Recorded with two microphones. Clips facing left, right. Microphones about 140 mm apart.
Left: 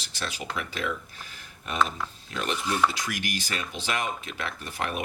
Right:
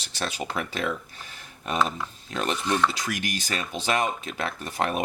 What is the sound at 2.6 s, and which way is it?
Stir, 5° left (ahead or behind).